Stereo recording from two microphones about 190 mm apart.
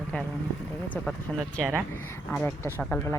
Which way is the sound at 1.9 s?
15° left (ahead or behind).